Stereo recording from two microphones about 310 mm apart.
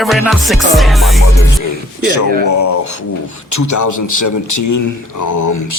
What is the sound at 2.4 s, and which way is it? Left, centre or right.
Speech, left.